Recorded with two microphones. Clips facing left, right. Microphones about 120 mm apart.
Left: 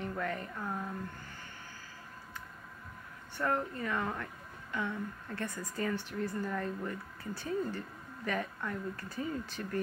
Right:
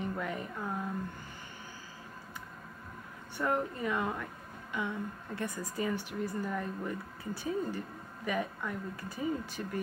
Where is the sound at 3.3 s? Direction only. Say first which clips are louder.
Right 1 dB; 15° right (ahead or behind).